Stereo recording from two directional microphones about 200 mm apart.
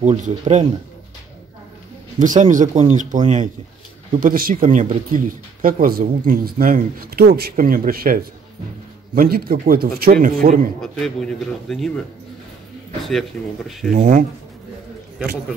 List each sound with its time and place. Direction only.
0.0 s speech: 35° right (ahead or behind)
2.1 s speech: 40° right (ahead or behind)
4.2 s speech: 45° right (ahead or behind)
10.8 s a man's voice: centre (ahead or behind)
13.9 s speech: 40° right (ahead or behind)